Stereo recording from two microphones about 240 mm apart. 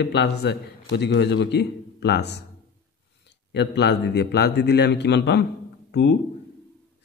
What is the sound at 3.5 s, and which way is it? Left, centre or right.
A man's voice, left.